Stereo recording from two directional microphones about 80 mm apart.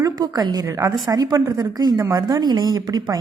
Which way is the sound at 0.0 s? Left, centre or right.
Right.